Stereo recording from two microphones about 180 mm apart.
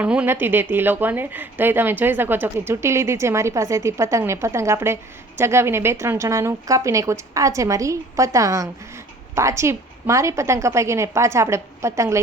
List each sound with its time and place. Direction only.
0.0 s a woman's voice: 5° right (ahead or behind)